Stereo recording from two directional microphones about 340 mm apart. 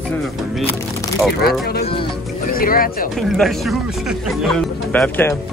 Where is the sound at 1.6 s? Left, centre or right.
Left.